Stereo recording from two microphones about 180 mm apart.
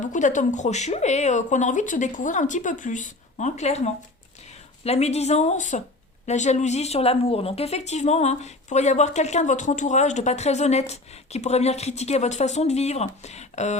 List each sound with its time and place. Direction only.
0.0 s a woman's voice: 45° left (ahead or behind)